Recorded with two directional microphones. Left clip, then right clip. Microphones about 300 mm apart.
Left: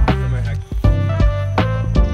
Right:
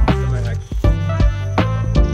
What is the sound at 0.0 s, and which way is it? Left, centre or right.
Music, centre.